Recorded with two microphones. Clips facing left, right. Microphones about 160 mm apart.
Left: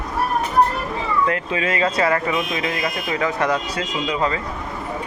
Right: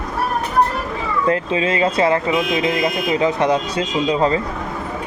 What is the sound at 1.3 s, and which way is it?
Speech, 25° right (ahead or behind).